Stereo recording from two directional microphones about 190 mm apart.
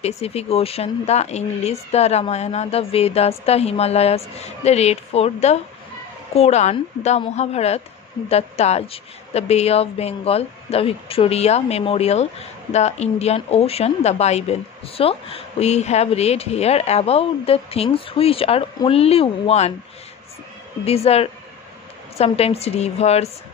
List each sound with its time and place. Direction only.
0.0 s a woman's voice: 35° left (ahead or behind)
20.8 s a woman's voice: 30° left (ahead or behind)